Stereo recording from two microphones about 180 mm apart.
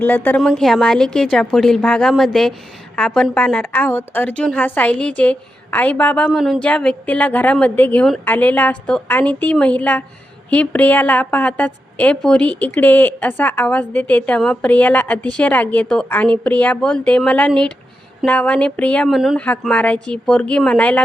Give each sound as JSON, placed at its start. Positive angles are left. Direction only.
{"t": 0.0, "sound": "a woman's voice", "side_deg": 10}